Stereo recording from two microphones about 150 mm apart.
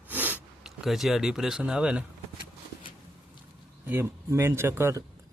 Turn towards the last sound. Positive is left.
turn(degrees=-15)  # may be behind; listen again after turning